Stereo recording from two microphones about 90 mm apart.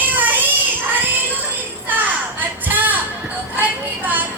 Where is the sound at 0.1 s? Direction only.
20° right (ahead or behind).